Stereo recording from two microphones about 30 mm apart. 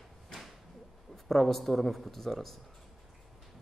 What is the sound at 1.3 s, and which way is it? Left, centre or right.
A man's voice, centre.